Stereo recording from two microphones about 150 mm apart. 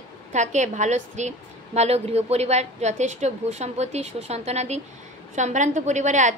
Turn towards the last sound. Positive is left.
turn(degrees=-55)  # may be behind; listen again after turning